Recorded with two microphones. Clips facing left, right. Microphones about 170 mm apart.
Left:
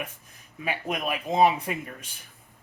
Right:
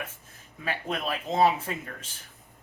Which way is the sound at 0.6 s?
15° left (ahead or behind).